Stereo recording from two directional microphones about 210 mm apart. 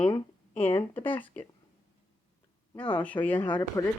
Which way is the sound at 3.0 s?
5° left (ahead or behind).